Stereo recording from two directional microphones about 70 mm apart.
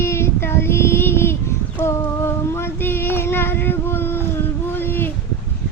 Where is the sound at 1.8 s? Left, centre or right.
Left.